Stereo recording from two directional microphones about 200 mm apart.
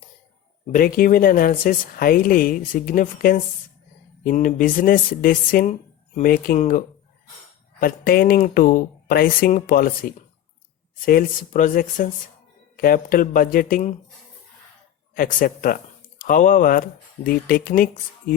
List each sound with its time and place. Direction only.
0.7 s speech: 45° left (ahead or behind)
15.1 s speech: 45° left (ahead or behind)